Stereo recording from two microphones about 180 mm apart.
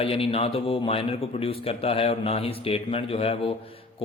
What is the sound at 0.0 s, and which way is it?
A man's voice, 30° left (ahead or behind).